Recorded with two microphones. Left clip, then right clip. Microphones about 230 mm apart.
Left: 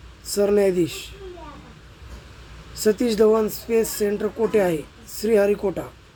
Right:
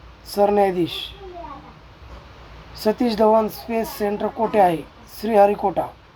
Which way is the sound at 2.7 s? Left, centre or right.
Centre.